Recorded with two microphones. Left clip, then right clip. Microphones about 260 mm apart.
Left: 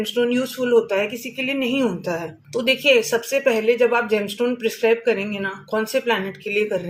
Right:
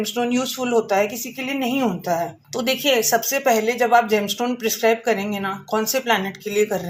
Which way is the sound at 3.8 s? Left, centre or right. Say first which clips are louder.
Right 2 dB; right.